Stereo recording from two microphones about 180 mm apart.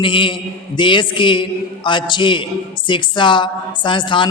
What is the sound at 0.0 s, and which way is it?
A woman's voice, 30° left (ahead or behind).